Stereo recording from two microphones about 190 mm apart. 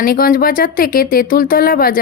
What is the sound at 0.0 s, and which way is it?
Speech, 50° left (ahead or behind).